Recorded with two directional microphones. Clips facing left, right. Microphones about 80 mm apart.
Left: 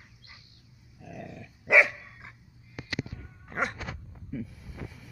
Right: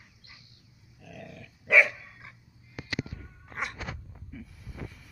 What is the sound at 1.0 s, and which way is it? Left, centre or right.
Dog, centre.